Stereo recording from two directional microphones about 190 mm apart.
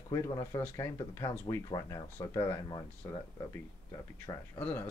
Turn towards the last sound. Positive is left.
turn(degrees=10)  # may be behind; listen again after turning